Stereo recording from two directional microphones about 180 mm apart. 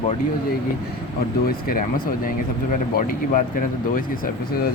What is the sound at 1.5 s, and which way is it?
Speech, 55° left (ahead or behind).